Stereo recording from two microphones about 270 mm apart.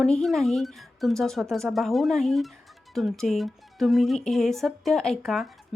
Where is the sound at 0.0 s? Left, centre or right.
Centre.